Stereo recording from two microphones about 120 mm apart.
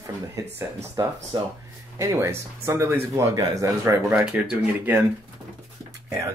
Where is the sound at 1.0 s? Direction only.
35° right (ahead or behind).